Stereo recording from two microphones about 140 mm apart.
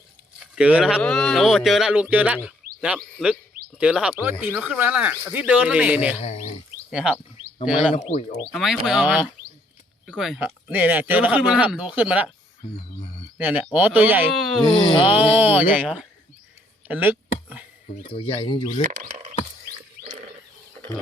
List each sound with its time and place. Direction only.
0.5 s speech: 10° right (ahead or behind)
6.1 s speech: 50° left (ahead or behind)
6.9 s speech: 5° right (ahead or behind)
7.9 s speech: 60° left (ahead or behind)
8.5 s speech: centre (ahead or behind)
10.7 s speech: 10° right (ahead or behind)
13.4 s speech: 10° right (ahead or behind)
14.6 s speech: 35° left (ahead or behind)
15.4 s speech: 10° right (ahead or behind)
16.9 s a sound: 15° right (ahead or behind)
18.1 s speech: 40° left (ahead or behind)
18.8 s speech: 60° right (ahead or behind)